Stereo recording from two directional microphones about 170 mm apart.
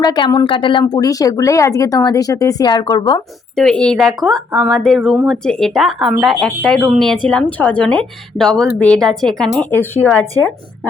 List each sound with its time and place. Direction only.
0.0 s speech: 25° left (ahead or behind)
3.5 s a woman's voice: 5° left (ahead or behind)